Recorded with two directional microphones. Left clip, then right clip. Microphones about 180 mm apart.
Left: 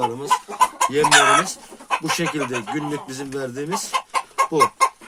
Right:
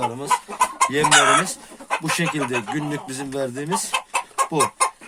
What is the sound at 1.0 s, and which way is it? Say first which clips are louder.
Speech: left 1 dB; centre (ahead or behind).